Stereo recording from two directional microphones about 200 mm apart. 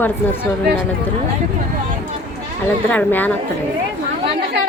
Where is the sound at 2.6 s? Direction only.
10° left (ahead or behind).